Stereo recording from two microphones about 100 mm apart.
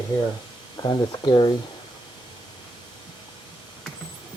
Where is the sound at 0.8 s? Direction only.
45° left (ahead or behind).